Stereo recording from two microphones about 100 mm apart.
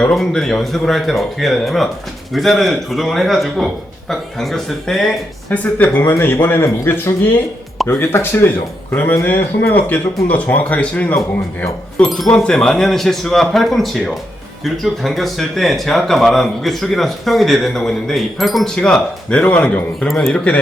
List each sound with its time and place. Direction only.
0.0 s speech: 5° left (ahead or behind)
12.0 s speech: centre (ahead or behind)
20.3 s speech: 10° left (ahead or behind)